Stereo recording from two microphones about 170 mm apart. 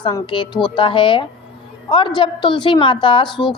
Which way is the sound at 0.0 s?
25° left (ahead or behind).